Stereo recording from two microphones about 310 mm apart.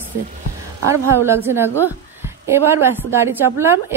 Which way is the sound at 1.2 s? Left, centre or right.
Centre.